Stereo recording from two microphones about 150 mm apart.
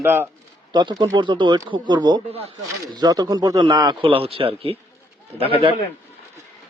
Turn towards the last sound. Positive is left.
turn(degrees=-40)  # may be behind; listen again after turning